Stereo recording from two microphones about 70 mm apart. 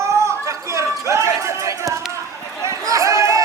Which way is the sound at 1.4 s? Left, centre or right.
Right.